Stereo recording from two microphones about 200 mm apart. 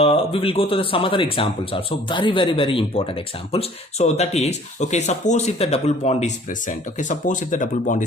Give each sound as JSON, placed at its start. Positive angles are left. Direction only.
{"t": 0.0, "sound": "speech", "side_deg": 30}